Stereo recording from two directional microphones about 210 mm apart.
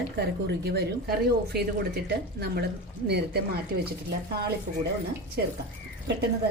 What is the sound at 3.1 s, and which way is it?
Speech, 50° right (ahead or behind).